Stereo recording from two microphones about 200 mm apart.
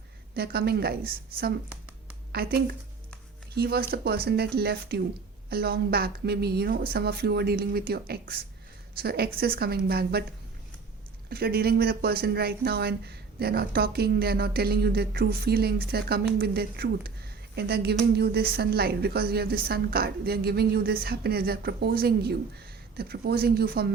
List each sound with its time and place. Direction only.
0.3 s speech: 50° right (ahead or behind)
1.7 s a sound: 5° right (ahead or behind)
2.3 s speech: 50° right (ahead or behind)
11.3 s speech: 50° right (ahead or behind)